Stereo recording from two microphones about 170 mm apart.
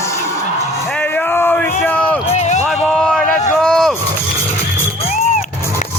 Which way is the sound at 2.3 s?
40° left (ahead or behind).